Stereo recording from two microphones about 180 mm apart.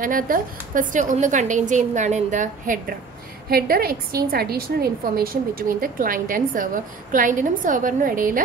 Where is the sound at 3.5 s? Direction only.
55° right (ahead or behind).